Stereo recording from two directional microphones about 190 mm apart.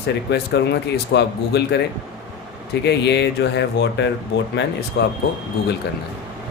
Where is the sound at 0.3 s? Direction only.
65° left (ahead or behind).